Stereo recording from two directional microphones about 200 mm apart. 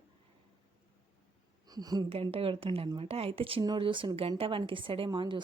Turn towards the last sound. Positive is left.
turn(degrees=-25)  # may be behind; listen again after turning